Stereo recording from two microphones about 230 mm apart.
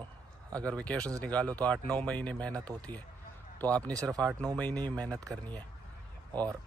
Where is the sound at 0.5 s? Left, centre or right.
Centre.